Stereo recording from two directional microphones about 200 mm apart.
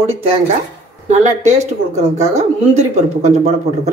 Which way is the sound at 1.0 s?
35° right (ahead or behind).